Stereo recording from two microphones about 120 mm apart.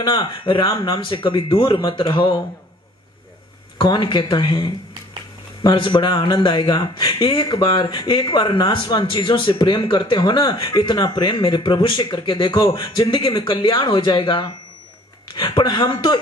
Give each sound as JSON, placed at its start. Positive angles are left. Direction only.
{"t": 0.0, "sound": "a man's voice", "side_deg": 40}
{"t": 3.8, "sound": "a man's voice", "side_deg": 40}